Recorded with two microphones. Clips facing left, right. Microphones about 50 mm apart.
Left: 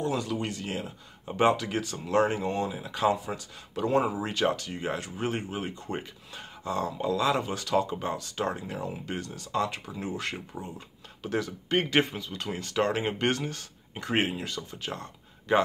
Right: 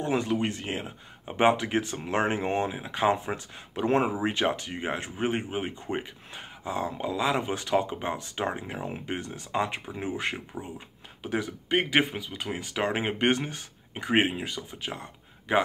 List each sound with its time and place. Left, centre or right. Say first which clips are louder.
0.0 s speech: right 3 dB; right
4.1 s speech: right 1 dB; right